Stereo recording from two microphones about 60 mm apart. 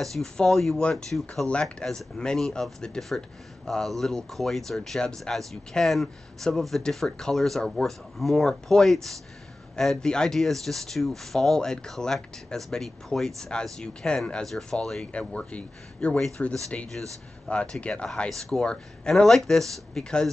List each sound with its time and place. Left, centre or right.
0.0 s speech: centre